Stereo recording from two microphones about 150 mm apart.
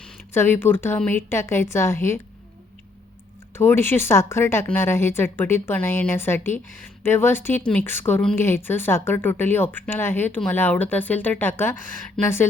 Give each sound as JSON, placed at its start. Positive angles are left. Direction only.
{"t": 0.0, "sound": "speech", "side_deg": 15}
{"t": 3.5, "sound": "speech", "side_deg": 15}